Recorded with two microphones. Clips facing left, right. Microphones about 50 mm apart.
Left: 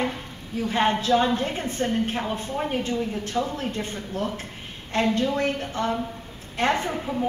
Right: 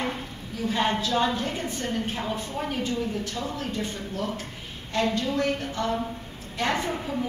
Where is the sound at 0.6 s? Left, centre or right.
Left.